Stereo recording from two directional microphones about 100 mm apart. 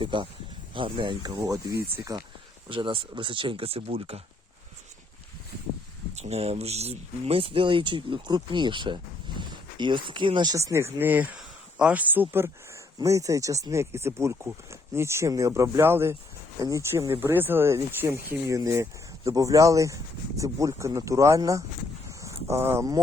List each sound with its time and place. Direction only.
0.0 s speech: 55° right (ahead or behind)
1.4 s speech: 35° right (ahead or behind)
2.6 s speech: 60° right (ahead or behind)
6.1 s speech: 90° right; by 10.5 s 55° right (ahead or behind)
10.5 s speech: 30° right (ahead or behind)
13.0 s speech: 35° right (ahead or behind)
16.6 s speech: 35° right (ahead or behind)
16.9 s speech: 25° right (ahead or behind)
22.2 s a sound: 25° right (ahead or behind)